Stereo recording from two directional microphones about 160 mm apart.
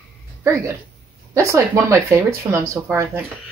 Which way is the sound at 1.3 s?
20° right (ahead or behind).